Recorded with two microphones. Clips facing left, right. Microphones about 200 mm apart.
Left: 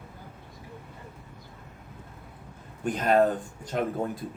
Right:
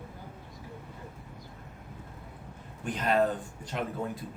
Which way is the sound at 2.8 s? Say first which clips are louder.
Left 4 dB; 45° left (ahead or behind).